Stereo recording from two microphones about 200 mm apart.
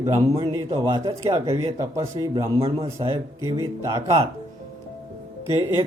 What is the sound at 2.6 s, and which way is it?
Speech, 30° right (ahead or behind).